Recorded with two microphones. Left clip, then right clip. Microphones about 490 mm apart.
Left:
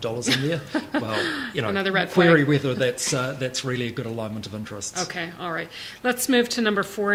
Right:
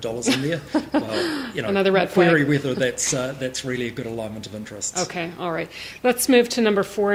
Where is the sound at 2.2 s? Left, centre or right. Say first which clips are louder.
Left 3 dB; left.